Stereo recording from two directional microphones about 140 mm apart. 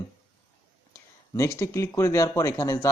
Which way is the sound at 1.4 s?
20° left (ahead or behind).